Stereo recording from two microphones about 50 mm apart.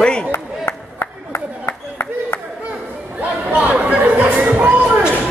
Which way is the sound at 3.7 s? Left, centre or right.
Right.